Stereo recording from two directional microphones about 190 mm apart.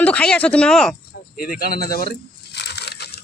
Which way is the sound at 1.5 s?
50° left (ahead or behind).